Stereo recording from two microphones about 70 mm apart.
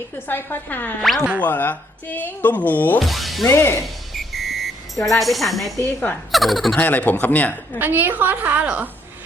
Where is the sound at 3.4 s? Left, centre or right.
Left.